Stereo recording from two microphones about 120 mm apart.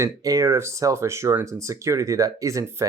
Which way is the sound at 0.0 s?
25° right (ahead or behind).